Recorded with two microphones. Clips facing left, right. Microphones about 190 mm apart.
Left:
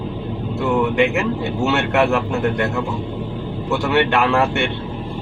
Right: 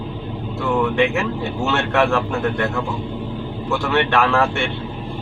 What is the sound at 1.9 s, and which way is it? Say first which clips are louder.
Speech: right 1 dB; 20° left (ahead or behind).